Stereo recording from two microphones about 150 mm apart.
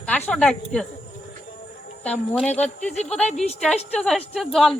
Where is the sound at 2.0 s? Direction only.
5° left (ahead or behind).